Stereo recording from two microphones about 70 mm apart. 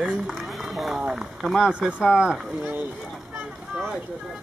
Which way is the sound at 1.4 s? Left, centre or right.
Centre.